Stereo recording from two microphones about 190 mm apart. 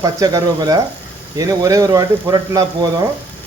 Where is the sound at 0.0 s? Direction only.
20° right (ahead or behind).